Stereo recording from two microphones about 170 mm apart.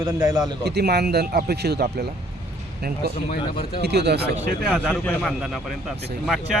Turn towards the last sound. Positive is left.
turn(degrees=0)  # may be behind; listen again after turning